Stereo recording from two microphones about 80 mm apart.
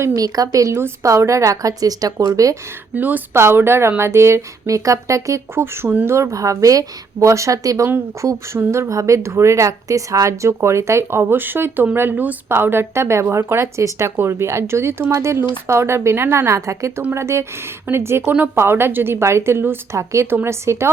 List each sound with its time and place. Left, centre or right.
0.1 s a woman's voice: right
2.9 s a woman's voice: right